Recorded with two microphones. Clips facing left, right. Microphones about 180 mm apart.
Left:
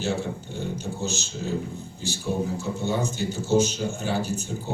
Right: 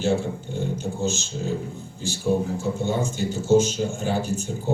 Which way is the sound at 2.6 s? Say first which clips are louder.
Right 2 dB; 40° left (ahead or behind).